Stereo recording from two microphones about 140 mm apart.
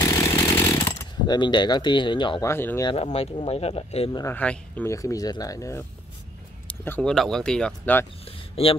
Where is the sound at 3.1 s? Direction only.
45° left (ahead or behind).